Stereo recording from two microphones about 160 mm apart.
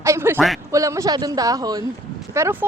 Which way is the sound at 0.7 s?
20° right (ahead or behind).